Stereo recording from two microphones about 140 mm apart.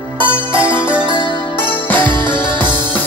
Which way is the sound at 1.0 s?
35° right (ahead or behind).